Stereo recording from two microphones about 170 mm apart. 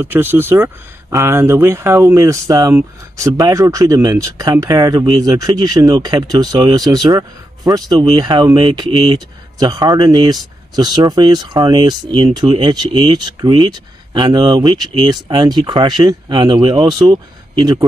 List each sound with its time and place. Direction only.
0.0 s speech: 10° right (ahead or behind)